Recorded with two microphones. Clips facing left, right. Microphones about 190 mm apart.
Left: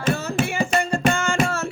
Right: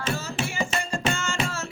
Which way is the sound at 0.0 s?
45° left (ahead or behind).